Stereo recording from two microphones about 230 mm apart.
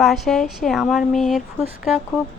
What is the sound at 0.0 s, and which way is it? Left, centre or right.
Speech, centre.